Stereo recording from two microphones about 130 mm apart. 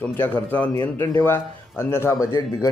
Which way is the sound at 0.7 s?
25° left (ahead or behind).